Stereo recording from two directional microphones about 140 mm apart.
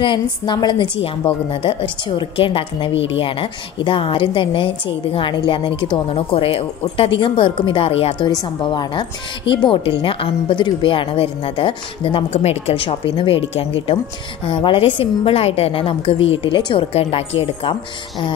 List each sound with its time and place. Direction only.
0.0 s a woman's voice: 35° left (ahead or behind)
8.3 s a woman's voice: 35° left (ahead or behind)